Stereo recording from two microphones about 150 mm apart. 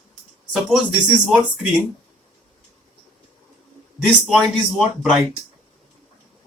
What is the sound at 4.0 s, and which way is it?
Speech, centre (ahead or behind).